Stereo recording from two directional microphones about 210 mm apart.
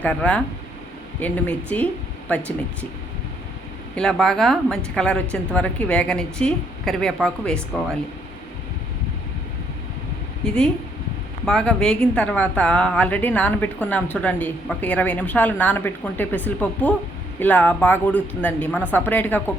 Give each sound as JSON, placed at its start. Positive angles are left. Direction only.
{"t": 0.0, "sound": "a woman's voice", "side_deg": 5}
{"t": 3.9, "sound": "a woman's voice", "side_deg": 5}
{"t": 10.4, "sound": "a woman's voice", "side_deg": 5}